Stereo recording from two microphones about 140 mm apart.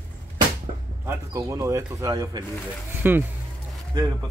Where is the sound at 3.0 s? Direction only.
15° right (ahead or behind).